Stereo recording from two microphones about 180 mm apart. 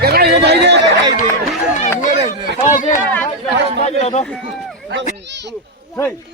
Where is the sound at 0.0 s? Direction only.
60° right (ahead or behind).